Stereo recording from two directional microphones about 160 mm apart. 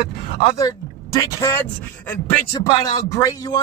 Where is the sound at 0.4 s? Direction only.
20° left (ahead or behind).